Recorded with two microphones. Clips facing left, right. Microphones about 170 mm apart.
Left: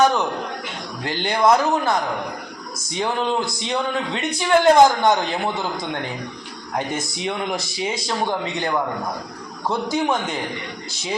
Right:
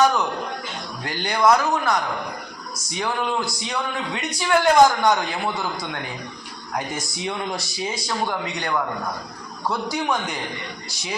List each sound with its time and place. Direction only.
1.0 s speech: 25° left (ahead or behind)
3.0 s speech: 25° left (ahead or behind)
6.7 s speech: 25° left (ahead or behind)